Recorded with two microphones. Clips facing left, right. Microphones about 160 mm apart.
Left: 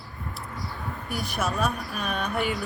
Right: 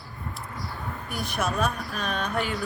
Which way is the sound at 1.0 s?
Centre (ahead or behind).